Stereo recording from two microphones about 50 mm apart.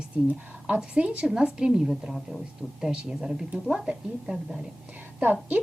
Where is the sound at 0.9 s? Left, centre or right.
Right.